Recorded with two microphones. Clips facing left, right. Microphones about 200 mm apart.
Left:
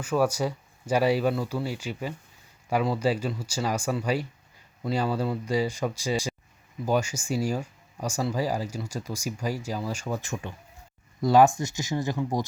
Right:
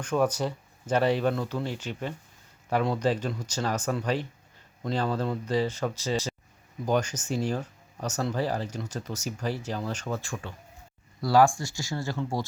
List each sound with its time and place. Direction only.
0.0 s speech: 5° left (ahead or behind)